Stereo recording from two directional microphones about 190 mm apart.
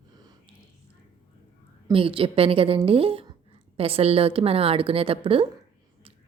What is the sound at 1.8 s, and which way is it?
A woman's voice, 30° right (ahead or behind).